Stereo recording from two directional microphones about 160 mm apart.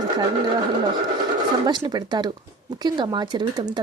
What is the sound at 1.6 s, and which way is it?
Speech, 30° right (ahead or behind).